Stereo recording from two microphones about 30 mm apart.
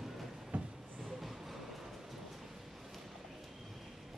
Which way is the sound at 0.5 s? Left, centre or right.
Right.